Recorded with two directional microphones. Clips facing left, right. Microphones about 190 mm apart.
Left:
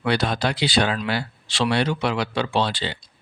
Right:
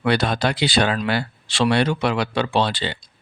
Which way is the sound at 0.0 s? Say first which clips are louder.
Right 2 dB; 55° right (ahead or behind).